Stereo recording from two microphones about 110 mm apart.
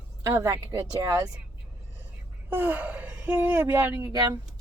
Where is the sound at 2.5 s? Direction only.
15° right (ahead or behind).